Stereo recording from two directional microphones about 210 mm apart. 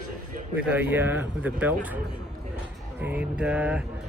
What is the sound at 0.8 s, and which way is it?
Speech, 10° right (ahead or behind).